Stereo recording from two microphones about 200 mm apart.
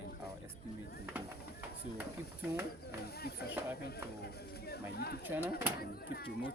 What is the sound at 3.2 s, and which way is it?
Speech, 50° left (ahead or behind).